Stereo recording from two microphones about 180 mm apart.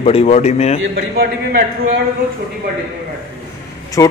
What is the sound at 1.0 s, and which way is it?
Speech, 60° right (ahead or behind).